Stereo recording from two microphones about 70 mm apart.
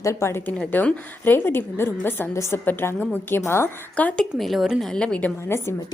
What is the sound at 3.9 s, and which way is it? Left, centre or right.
Speech, left.